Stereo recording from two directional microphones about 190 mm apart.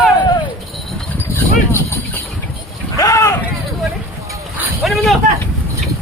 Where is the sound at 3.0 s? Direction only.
15° left (ahead or behind).